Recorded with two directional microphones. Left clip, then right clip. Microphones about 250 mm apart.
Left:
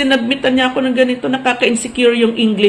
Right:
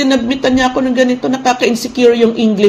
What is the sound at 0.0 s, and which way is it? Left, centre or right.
A woman's voice, right.